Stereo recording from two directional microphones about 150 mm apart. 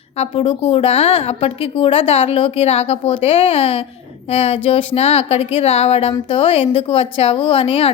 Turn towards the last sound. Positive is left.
turn(degrees=35)  # may be behind; listen again after turning